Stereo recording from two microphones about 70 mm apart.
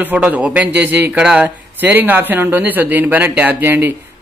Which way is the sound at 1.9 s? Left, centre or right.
Right.